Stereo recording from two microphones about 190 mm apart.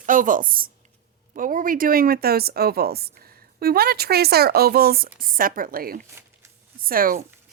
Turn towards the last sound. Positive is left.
turn(degrees=-50)  # may be behind; listen again after turning